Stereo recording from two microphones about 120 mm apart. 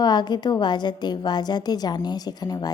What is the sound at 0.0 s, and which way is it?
A woman's voice, 35° left (ahead or behind).